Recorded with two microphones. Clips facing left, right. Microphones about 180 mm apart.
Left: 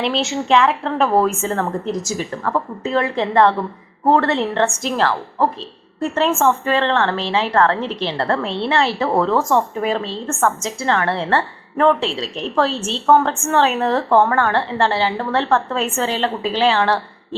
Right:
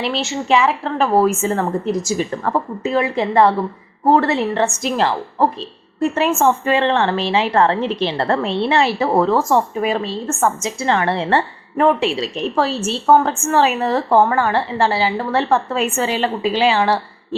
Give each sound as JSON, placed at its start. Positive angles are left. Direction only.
{"t": 0.0, "sound": "a woman's voice", "side_deg": 0}
{"t": 2.8, "sound": "a woman's voice", "side_deg": -10}
{"t": 4.9, "sound": "a woman's voice", "side_deg": -15}